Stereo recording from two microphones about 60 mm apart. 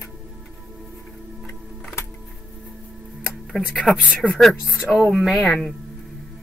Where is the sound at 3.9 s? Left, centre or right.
Right.